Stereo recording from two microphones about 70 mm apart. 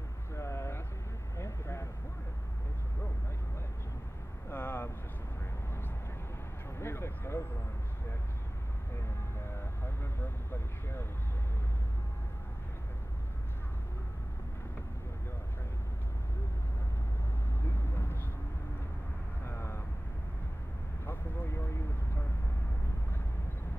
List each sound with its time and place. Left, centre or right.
0.4 s vehicle: left
4.5 s vehicle: left
6.8 s vehicle: left
9.8 s vehicle: left
17.6 s vehicle: left
19.4 s vehicle: left
21.0 s vehicle: left